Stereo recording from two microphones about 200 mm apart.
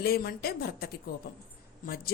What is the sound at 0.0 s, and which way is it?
Speech, 50° left (ahead or behind).